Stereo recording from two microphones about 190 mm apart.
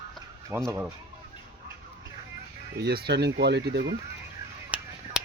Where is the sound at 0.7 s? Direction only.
15° right (ahead or behind).